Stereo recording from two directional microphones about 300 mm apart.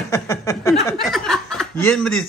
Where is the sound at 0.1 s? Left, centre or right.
Centre.